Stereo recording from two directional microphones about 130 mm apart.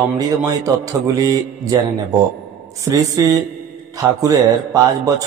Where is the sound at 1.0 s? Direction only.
25° right (ahead or behind).